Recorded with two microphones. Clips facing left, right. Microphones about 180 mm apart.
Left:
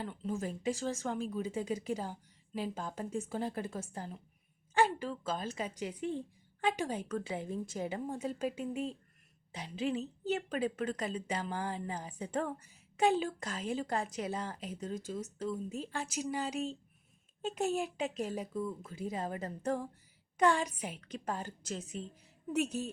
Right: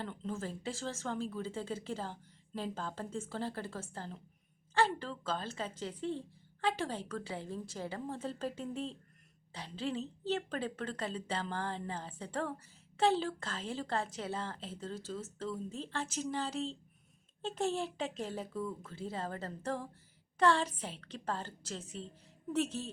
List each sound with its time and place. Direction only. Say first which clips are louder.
0.0 s speech: left 2 dB; 10° left (ahead or behind)